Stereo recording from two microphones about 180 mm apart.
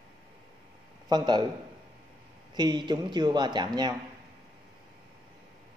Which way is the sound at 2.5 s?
25° right (ahead or behind).